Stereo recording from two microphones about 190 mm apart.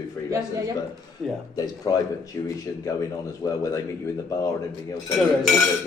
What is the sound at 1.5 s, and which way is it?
Speech, 20° left (ahead or behind).